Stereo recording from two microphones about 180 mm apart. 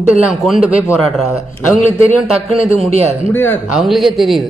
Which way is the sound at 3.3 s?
10° left (ahead or behind).